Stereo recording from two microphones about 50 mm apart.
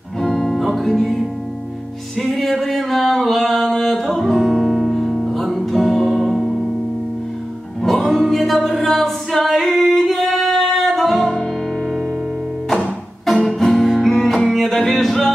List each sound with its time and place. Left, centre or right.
0.2 s music: centre
2.1 s singing: centre
7.8 s music: centre
8.3 s a capella: centre
12.6 s music: centre